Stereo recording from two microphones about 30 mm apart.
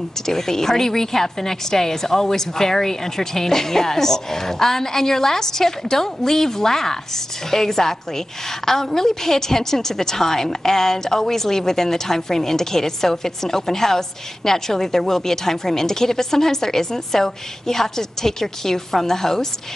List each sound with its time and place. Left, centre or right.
0.3 s a woman's voice: centre